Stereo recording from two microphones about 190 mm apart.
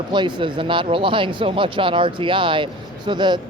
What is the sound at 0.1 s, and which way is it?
Speech, 25° right (ahead or behind).